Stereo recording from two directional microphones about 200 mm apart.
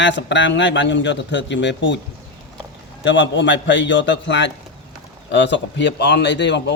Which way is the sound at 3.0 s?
65° left (ahead or behind).